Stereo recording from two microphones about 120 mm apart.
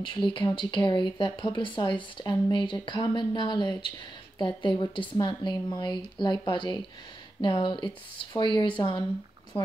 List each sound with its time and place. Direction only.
0.0 s speech: 40° left (ahead or behind)